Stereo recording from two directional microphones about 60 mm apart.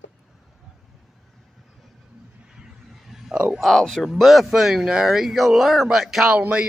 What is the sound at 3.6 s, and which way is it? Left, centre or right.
Speech, centre.